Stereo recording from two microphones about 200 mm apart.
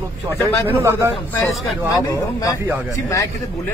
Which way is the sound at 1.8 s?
15° left (ahead or behind).